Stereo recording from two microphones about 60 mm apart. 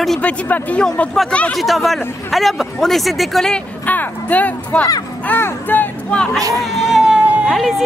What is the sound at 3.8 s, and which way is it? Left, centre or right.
Speech, left.